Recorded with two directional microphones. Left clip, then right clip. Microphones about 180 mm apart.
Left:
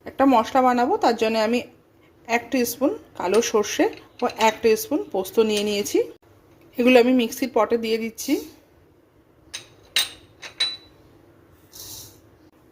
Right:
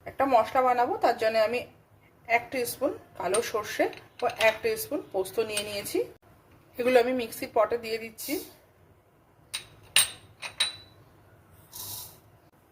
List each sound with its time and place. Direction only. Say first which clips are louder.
0.0 s a woman's voice: left 5 dB; 45° left (ahead or behind)